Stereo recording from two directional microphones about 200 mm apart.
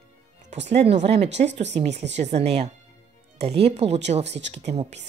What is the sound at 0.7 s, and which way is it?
A woman's voice, 30° right (ahead or behind).